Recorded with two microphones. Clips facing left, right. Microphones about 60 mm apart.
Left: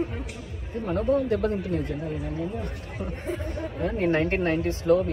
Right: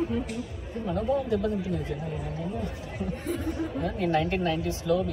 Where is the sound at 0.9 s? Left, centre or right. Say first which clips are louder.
Left 3 dB; left.